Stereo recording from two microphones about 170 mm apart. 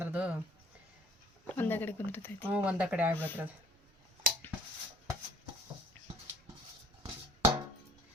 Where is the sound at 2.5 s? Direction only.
10° right (ahead or behind).